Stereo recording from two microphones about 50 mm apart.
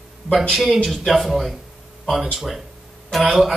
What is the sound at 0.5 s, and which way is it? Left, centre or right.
Speech, centre.